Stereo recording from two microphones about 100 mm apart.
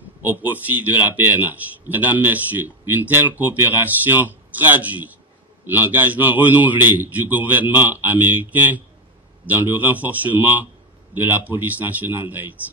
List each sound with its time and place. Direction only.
0.2 s a man's voice: 20° right (ahead or behind)